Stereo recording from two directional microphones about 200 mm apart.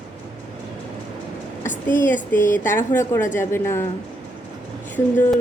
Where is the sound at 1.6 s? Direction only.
40° left (ahead or behind).